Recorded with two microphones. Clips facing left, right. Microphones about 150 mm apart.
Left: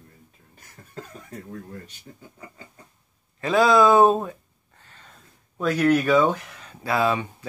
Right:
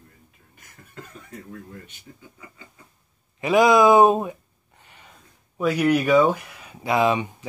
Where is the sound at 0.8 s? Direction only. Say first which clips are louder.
Left 1 dB; 35° left (ahead or behind).